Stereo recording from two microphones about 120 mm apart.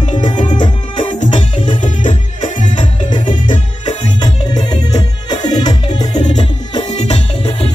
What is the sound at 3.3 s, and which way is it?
Music, 40° left (ahead or behind).